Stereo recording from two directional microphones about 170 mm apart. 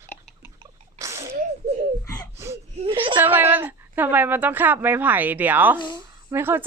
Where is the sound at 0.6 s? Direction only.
15° right (ahead or behind).